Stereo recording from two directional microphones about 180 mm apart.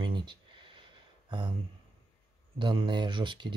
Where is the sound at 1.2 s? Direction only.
25° right (ahead or behind).